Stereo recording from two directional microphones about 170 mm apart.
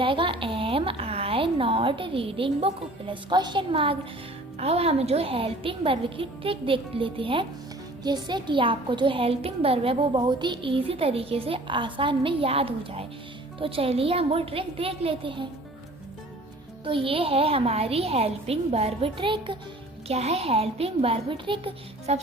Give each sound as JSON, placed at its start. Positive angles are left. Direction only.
{"t": 0.0, "sound": "a child's voice", "side_deg": -30}
{"t": 16.8, "sound": "a child's voice", "side_deg": -30}